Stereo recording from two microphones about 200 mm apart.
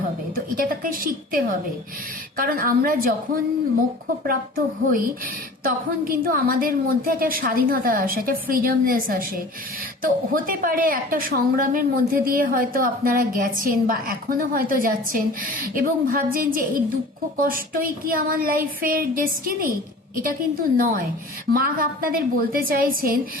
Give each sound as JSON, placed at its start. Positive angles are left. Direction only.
{"t": 0.3, "sound": "a woman's voice", "side_deg": -45}
{"t": 4.3, "sound": "a woman's voice", "side_deg": -45}